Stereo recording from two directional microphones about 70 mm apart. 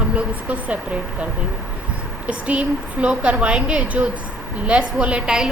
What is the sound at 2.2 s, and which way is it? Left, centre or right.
A woman's voice, centre.